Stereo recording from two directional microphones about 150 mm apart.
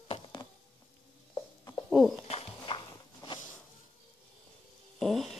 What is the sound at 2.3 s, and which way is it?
Walk, 40° left (ahead or behind).